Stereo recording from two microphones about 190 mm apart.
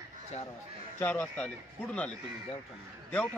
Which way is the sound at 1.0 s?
10° left (ahead or behind).